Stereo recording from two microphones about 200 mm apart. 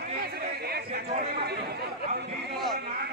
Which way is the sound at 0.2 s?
50° right (ahead or behind).